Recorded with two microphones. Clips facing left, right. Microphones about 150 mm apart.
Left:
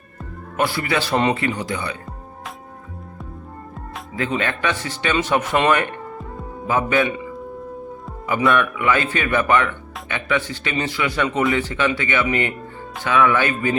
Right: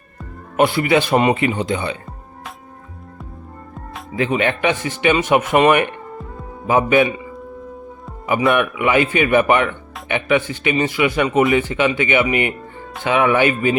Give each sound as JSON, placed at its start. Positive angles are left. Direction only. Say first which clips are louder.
{"t": 0.5, "sound": "speech", "louder": "right 6 dB", "side_deg": -20}
{"t": 4.1, "sound": "speech", "louder": "right 5 dB", "side_deg": -15}
{"t": 8.4, "sound": "speech", "louder": "right 1 dB", "side_deg": -20}